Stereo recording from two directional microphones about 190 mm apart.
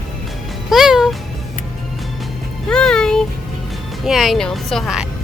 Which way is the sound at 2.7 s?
5° left (ahead or behind).